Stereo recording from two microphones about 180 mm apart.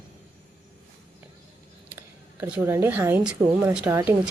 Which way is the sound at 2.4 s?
10° right (ahead or behind).